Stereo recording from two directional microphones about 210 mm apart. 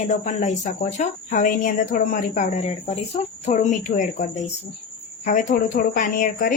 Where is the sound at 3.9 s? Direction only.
50° left (ahead or behind).